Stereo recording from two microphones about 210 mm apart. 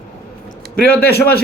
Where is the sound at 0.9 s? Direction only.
45° left (ahead or behind).